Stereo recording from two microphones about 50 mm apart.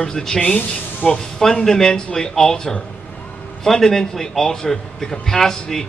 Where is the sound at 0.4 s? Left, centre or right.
Left.